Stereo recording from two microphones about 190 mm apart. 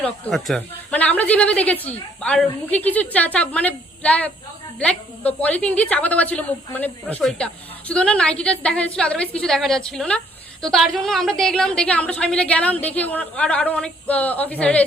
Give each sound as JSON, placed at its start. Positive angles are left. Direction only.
{"t": 0.0, "sound": "a woman's voice", "side_deg": 0}